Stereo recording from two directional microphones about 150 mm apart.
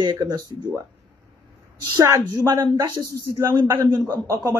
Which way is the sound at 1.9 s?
20° right (ahead or behind).